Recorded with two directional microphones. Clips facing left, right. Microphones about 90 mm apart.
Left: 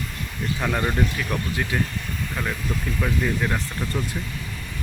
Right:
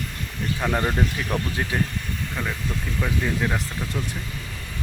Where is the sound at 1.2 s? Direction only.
25° right (ahead or behind).